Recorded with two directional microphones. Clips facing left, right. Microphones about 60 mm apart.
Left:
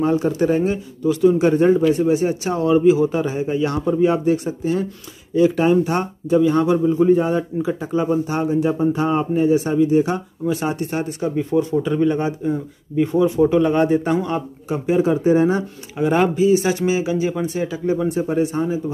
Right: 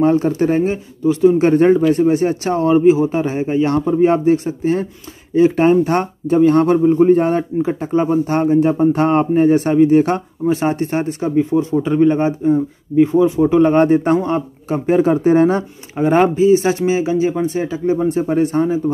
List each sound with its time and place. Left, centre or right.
0.0 s speech: right
1.6 s speech: right
8.9 s a man's voice: right
9.2 s speech: right
10.4 s speech: right
11.3 s speech: centre
12.4 s speech: centre
13.6 s speech: right
16.0 s speech: right
18.3 s speech: right